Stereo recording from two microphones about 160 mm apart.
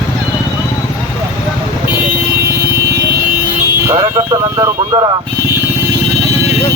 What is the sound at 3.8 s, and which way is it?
Vehicle, 25° right (ahead or behind).